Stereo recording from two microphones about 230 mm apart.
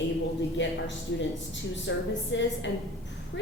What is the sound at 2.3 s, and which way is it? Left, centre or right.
Speech, left.